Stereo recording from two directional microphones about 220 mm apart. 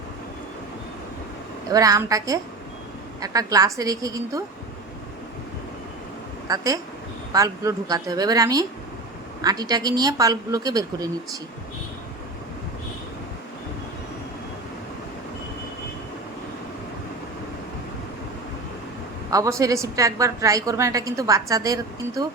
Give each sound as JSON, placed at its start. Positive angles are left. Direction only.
{"t": 1.7, "sound": "a woman's voice", "side_deg": -15}
{"t": 6.5, "sound": "a woman's voice", "side_deg": -15}
{"t": 19.3, "sound": "a woman's voice", "side_deg": -15}